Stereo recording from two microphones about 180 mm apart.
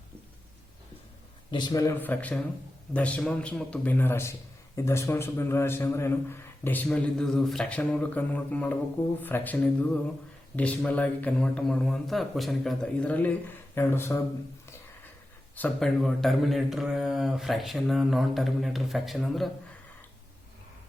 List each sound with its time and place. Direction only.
1.5 s a man's voice: 25° left (ahead or behind)
15.5 s speech: 5° left (ahead or behind)